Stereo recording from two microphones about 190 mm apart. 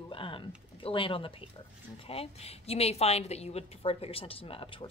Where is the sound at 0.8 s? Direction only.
30° left (ahead or behind).